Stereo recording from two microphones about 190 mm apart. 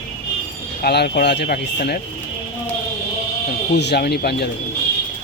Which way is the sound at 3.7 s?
65° left (ahead or behind).